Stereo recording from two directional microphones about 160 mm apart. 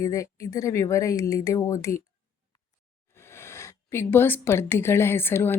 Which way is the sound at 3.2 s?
15° left (ahead or behind).